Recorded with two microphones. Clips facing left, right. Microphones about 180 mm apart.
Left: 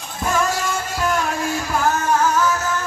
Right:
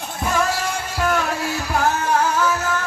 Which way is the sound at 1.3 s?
45° left (ahead or behind).